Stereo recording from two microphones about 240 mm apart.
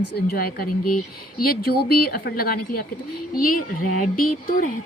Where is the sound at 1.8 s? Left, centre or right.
Left.